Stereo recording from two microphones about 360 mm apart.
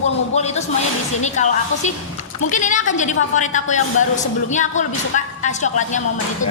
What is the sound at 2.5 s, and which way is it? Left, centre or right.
Speech, left.